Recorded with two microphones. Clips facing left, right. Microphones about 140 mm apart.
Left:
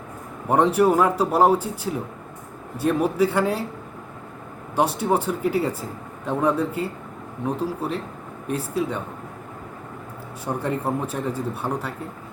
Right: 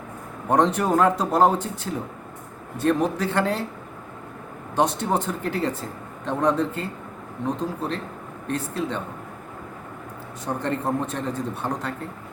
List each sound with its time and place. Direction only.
0.4 s speech: 10° left (ahead or behind)
4.7 s speech: 10° left (ahead or behind)
10.4 s speech: 10° left (ahead or behind)